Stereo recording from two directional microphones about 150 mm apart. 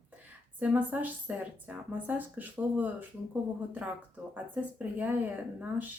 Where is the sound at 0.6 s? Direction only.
10° right (ahead or behind).